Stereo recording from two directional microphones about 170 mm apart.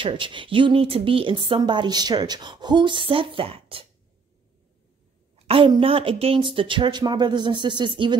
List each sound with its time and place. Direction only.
0.0 s speech: 30° right (ahead or behind)
5.5 s speech: 30° right (ahead or behind)